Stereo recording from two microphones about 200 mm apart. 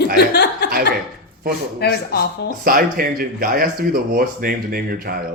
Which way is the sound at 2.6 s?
45° right (ahead or behind).